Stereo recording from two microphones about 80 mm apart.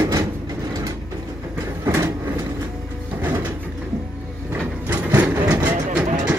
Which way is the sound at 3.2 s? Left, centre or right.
Right.